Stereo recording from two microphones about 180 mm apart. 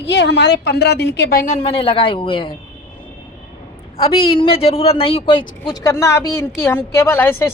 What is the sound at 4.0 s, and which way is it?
A woman's voice, 30° left (ahead or behind).